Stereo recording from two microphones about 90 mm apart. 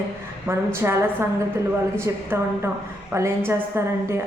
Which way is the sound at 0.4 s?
25° right (ahead or behind).